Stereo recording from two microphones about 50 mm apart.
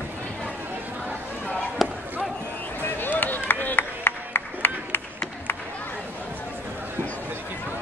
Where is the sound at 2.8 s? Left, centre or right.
Left.